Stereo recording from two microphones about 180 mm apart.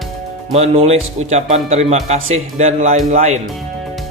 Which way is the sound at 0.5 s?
35° right (ahead or behind).